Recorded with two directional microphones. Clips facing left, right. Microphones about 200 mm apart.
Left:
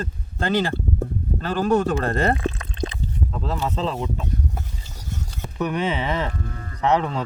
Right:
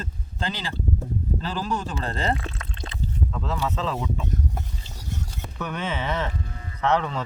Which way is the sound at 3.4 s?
35° left (ahead or behind).